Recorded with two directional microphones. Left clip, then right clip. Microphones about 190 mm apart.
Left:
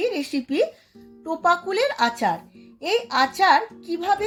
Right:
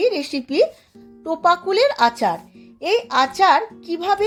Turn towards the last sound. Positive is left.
turn(degrees=-40)  # may be behind; listen again after turning